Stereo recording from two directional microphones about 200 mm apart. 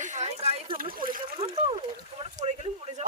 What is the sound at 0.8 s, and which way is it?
Speech, 45° right (ahead or behind).